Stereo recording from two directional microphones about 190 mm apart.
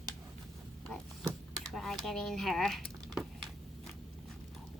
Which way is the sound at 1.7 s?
Centre (ahead or behind).